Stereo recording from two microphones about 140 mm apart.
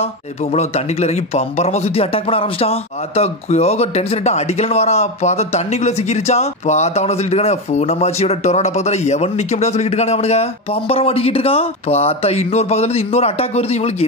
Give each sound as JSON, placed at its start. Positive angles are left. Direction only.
{"t": 0.6, "sound": "a man's voice", "side_deg": 50}